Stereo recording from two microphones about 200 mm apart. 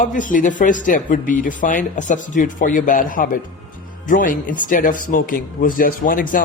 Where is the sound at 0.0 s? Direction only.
40° left (ahead or behind).